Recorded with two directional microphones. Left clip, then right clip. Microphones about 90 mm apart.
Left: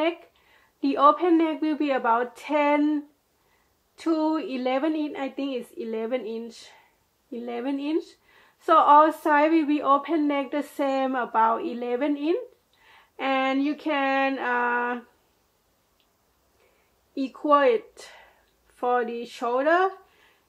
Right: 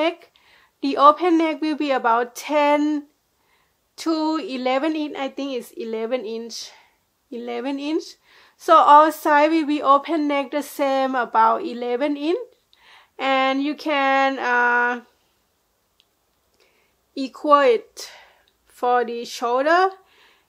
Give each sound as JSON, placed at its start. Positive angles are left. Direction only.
{"t": 0.0, "sound": "a woman's voice", "side_deg": -45}
{"t": 17.1, "sound": "a woman's voice", "side_deg": -45}